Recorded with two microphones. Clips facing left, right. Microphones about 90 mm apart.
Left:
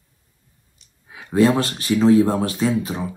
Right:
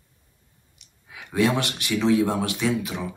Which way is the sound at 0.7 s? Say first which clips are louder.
Left 2 dB; 30° left (ahead or behind).